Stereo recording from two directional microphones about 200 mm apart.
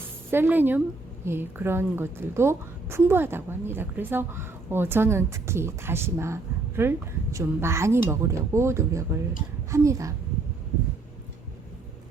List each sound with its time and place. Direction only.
0.3 s a woman's voice: 10° right (ahead or behind)